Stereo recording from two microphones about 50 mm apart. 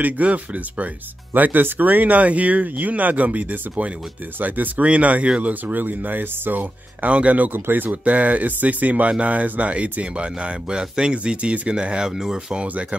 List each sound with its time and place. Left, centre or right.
0.0 s speech: right
7.5 s speech: right
8.0 s speech: right; by 12.5 s centre
12.5 s speech: right